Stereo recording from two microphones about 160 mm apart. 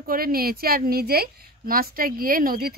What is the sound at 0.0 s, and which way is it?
A woman's voice, 65° right (ahead or behind).